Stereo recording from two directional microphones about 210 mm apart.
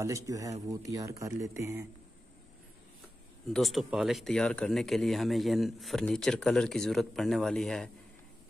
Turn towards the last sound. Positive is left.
turn(degrees=0)  # may be behind; listen again after turning